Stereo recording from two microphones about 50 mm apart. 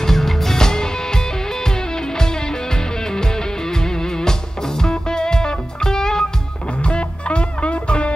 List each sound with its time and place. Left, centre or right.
0.0 s music: centre; by 8.1 s left